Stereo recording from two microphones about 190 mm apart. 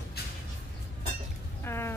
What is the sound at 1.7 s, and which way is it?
Speech, 15° left (ahead or behind).